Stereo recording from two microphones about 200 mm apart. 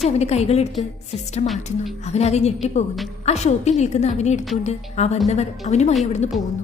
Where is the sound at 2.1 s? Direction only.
30° left (ahead or behind).